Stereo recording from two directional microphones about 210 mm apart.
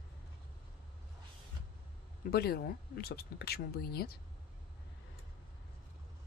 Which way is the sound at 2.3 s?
45° left (ahead or behind).